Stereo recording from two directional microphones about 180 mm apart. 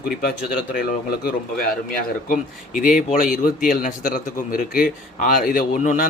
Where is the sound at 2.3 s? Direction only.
50° left (ahead or behind).